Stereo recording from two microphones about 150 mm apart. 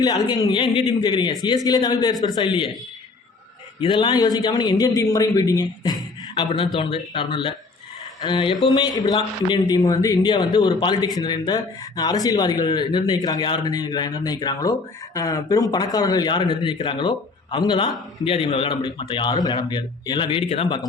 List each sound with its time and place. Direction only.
0.0 s a man's voice: 25° left (ahead or behind)
3.8 s a man's voice: 30° left (ahead or behind)